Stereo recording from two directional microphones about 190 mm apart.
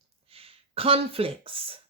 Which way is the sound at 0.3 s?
30° right (ahead or behind).